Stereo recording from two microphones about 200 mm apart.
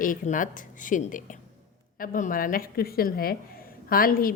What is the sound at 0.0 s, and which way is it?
A woman's voice, 40° left (ahead or behind).